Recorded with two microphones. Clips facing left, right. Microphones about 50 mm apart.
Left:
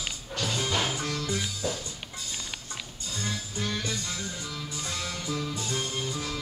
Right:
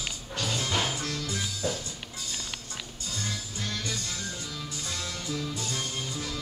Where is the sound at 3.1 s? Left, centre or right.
Centre.